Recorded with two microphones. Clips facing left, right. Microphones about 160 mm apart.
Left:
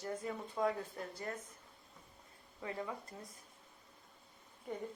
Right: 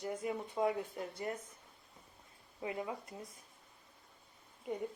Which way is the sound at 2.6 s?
15° right (ahead or behind).